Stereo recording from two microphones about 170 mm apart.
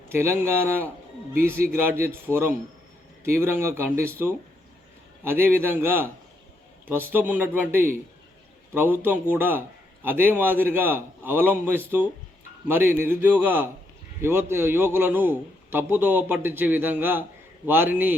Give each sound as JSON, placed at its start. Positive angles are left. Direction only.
{"t": 0.1, "sound": "a man's voice", "side_deg": -15}